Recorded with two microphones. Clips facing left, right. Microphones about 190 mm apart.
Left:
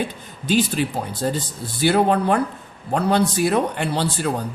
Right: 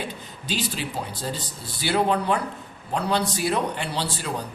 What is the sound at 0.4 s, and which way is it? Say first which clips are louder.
A man's voice: left 9 dB; 50° left (ahead or behind).